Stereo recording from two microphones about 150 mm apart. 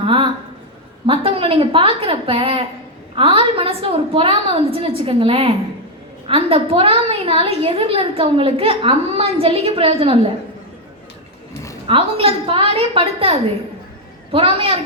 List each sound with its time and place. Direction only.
0.0 s a woman's voice: 35° right (ahead or behind)
11.9 s a woman's voice: 40° right (ahead or behind)
14.3 s a woman's voice: 35° right (ahead or behind)